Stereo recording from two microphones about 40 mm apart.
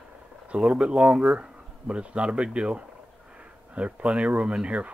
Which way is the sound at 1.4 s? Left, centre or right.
Right.